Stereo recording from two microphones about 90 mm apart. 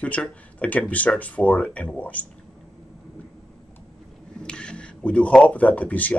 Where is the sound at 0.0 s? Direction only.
15° left (ahead or behind).